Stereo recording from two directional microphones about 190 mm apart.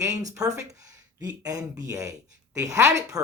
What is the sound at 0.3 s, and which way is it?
Speech, 20° right (ahead or behind).